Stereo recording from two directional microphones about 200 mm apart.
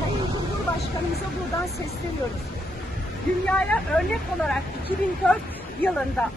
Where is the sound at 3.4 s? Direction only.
5° left (ahead or behind).